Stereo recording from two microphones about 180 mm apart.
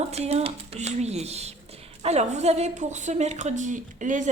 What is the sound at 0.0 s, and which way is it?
A woman's voice, 35° right (ahead or behind).